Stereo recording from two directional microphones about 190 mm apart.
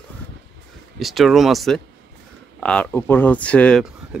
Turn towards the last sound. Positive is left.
turn(degrees=5)  # may be behind; listen again after turning